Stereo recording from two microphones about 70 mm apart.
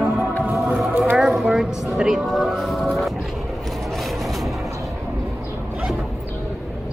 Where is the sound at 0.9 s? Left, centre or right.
Right.